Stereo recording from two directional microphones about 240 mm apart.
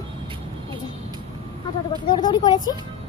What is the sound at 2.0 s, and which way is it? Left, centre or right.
Speech, centre.